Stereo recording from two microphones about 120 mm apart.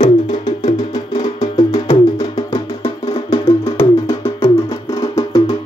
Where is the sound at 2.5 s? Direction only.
50° left (ahead or behind).